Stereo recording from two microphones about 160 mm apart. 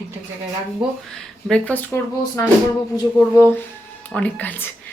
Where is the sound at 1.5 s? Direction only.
10° left (ahead or behind).